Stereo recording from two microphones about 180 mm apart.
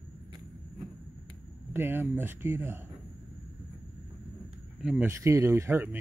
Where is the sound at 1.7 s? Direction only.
10° right (ahead or behind).